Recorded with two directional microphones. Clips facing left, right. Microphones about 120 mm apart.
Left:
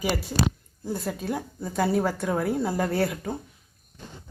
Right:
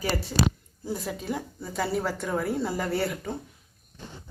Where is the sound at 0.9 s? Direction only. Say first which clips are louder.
Left 2 dB; centre (ahead or behind).